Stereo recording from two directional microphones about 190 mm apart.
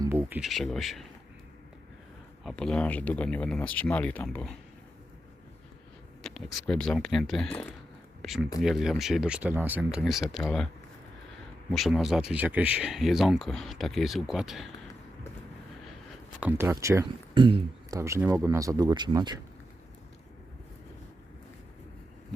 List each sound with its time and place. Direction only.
0.0 s speech: 10° right (ahead or behind)
2.4 s speech: centre (ahead or behind)
6.2 s speech: centre (ahead or behind)
11.7 s speech: centre (ahead or behind)
16.4 s speech: 10° right (ahead or behind)
17.3 s speech: 25° right (ahead or behind)